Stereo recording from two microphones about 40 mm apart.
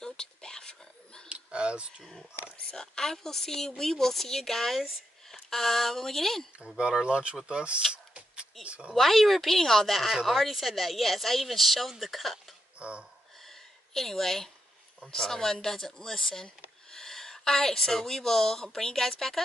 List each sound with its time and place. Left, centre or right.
0.0 s whispering: centre
1.3 s a sound: right
2.7 s speech: centre
6.8 s speech: right
7.9 s a sound: right
8.6 s speech: right
8.9 s speech: centre
12.7 s speech: right
13.5 s a sound: centre
15.0 s speech: centre